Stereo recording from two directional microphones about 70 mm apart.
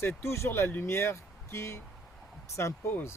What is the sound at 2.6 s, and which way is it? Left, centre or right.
Speech, left.